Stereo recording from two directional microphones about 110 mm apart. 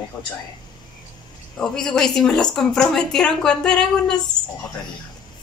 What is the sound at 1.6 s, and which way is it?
A woman's voice, 5° left (ahead or behind).